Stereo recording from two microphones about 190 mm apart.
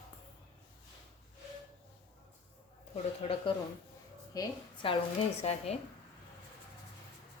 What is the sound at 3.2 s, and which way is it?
A woman's voice, 30° left (ahead or behind).